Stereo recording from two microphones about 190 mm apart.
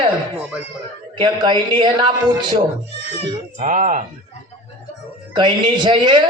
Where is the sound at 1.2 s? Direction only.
25° right (ahead or behind).